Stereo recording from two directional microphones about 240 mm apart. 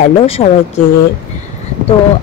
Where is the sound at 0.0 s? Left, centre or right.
Left.